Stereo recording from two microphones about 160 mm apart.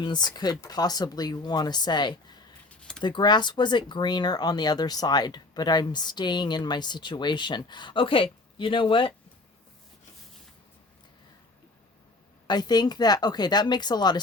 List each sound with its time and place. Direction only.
0.0 s speech: 25° left (ahead or behind)
2.6 s a sound: 5° left (ahead or behind)
3.0 s speech: 30° left (ahead or behind)
12.5 s speech: 25° left (ahead or behind)